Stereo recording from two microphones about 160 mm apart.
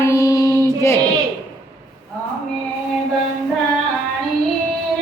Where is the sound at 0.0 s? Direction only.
20° left (ahead or behind).